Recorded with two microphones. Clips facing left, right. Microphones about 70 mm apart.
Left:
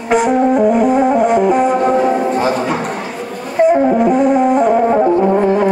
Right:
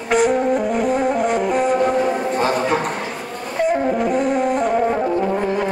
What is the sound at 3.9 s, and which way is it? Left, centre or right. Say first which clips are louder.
Music: left 7 dB; centre.